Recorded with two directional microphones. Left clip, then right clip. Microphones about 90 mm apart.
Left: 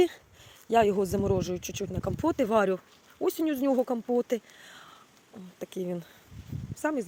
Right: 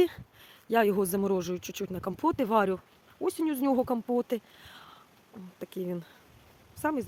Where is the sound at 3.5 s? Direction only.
20° right (ahead or behind).